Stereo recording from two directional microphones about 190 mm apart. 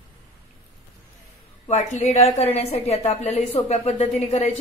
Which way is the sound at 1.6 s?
35° left (ahead or behind).